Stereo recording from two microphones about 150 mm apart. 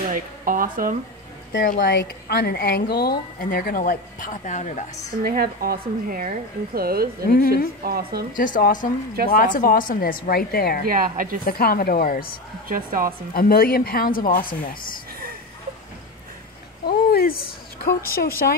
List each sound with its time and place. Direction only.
0.1 s a sound: 65° right (ahead or behind)
1.6 s a woman's voice: 75° left (ahead or behind); by 4.8 s 55° left (ahead or behind)
5.2 s a woman's voice: 80° right
7.2 s a woman's voice: 85° left
7.5 s a woman's voice: 90° right
8.4 s a woman's voice: 65° left (ahead or behind); by 10.8 s 90° left
10.9 s speech: 70° right (ahead or behind)
11.4 s a woman's voice: 80° left
12.6 s speech: 70° right (ahead or behind)
13.3 s a woman's voice: 80° left
16.8 s a woman's voice: 90° left